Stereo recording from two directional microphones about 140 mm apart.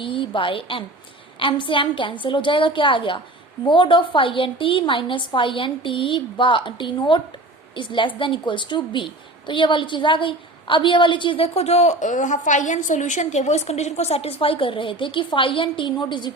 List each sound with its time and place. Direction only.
0.0 s a woman's voice: 40° left (ahead or behind)